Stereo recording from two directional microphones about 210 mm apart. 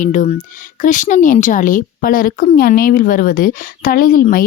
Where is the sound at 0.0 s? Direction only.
35° left (ahead or behind).